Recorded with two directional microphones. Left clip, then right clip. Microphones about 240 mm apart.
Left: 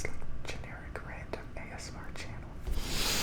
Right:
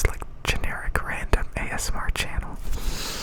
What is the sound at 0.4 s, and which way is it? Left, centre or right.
Whispering, right.